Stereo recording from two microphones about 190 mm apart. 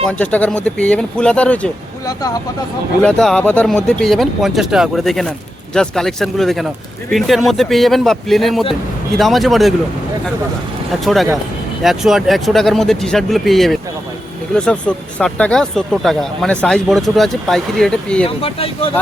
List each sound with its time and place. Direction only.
0.0 s speech: 5° left (ahead or behind)
2.0 s speech: 20° left (ahead or behind)
3.0 s speech: 5° left (ahead or behind)
11.0 s speech: centre (ahead or behind)
18.3 s speech: 30° left (ahead or behind)